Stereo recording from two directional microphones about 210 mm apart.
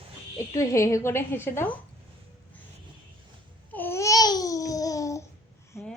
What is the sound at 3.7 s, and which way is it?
Babbling, 10° left (ahead or behind).